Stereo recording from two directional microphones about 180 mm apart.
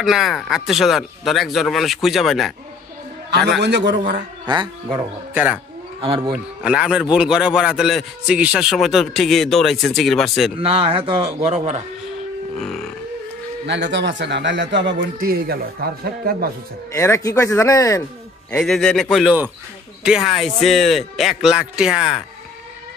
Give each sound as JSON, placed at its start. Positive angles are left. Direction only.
{"t": 0.0, "sound": "a man's voice", "side_deg": 0}
{"t": 3.3, "sound": "a man's voice", "side_deg": -70}
{"t": 4.5, "sound": "speech", "side_deg": -25}
{"t": 5.3, "sound": "speech", "side_deg": -10}
{"t": 5.9, "sound": "speech", "side_deg": -30}
{"t": 6.3, "sound": "a man's voice", "side_deg": -5}
{"t": 10.6, "sound": "a man's voice", "side_deg": -30}
{"t": 12.5, "sound": "a sound", "side_deg": 5}
{"t": 13.7, "sound": "a man's voice", "side_deg": -75}
{"t": 15.1, "sound": "speech", "side_deg": -55}
{"t": 16.9, "sound": "speech", "side_deg": 15}
{"t": 18.5, "sound": "a man's voice", "side_deg": 5}